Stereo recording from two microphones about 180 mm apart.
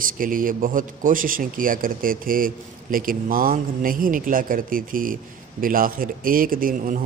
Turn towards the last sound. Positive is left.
turn(degrees=-50)  # may be behind; listen again after turning